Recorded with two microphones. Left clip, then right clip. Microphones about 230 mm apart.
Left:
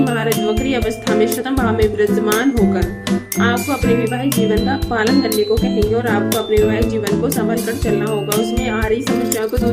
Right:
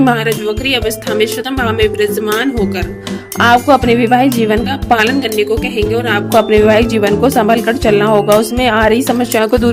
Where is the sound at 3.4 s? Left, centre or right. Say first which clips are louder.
Right 11 dB; right.